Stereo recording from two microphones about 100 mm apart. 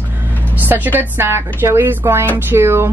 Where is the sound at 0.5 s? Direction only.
20° right (ahead or behind).